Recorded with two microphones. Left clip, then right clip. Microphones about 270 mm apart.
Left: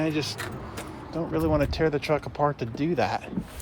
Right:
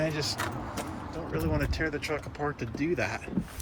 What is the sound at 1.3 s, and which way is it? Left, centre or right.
Speech, centre.